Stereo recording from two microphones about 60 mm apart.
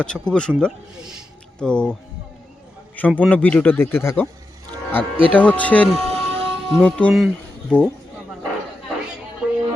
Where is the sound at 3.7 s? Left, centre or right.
Left.